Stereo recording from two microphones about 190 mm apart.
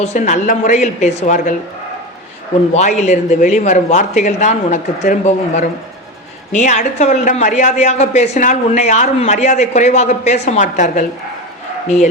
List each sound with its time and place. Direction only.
0.0 s a woman's voice: 40° left (ahead or behind)
2.7 s a woman's voice: 35° left (ahead or behind)